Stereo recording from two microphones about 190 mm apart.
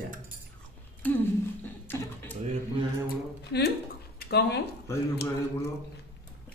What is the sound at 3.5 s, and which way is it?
Speech, 65° left (ahead or behind).